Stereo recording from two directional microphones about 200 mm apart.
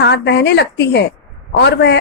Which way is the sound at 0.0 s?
55° left (ahead or behind).